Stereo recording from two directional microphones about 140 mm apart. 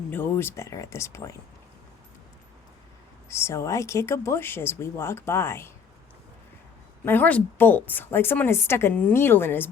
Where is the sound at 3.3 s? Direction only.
20° left (ahead or behind).